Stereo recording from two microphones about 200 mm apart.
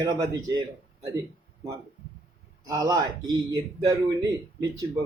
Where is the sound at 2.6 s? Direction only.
20° right (ahead or behind).